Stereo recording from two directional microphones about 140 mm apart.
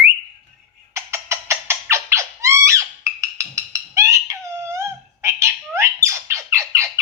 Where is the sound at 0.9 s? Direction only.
20° right (ahead or behind).